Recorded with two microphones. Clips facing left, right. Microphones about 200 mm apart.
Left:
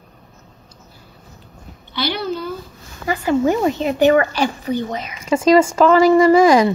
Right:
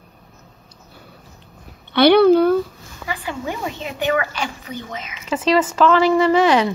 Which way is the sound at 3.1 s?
45° left (ahead or behind).